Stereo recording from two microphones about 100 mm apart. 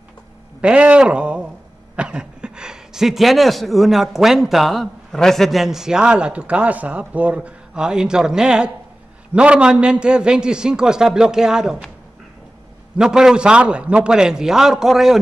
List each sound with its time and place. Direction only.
0.6 s speech: 10° right (ahead or behind)
12.9 s speech: 5° right (ahead or behind)